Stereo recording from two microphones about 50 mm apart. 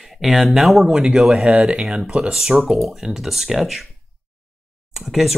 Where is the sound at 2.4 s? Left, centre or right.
Centre.